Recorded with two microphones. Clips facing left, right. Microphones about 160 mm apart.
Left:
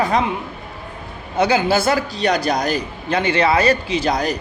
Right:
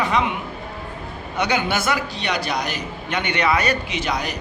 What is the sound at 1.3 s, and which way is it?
A man's voice, 30° left (ahead or behind).